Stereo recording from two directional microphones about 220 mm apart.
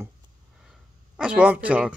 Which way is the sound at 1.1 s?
5° right (ahead or behind).